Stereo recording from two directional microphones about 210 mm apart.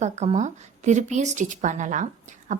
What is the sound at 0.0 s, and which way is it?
A woman's voice, 35° right (ahead or behind).